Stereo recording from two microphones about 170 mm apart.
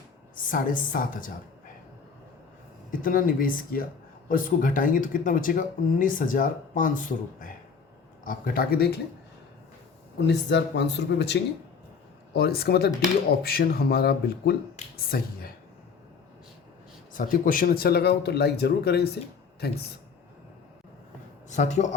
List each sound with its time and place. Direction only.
0.4 s speech: 50° left (ahead or behind)
2.9 s speech: 55° left (ahead or behind)
10.2 s speech: 90° left
12.3 s speech: 65° left (ahead or behind)
17.2 s speech: 55° left (ahead or behind); by 19.7 s 75° left (ahead or behind)
21.5 s speech: 45° left (ahead or behind)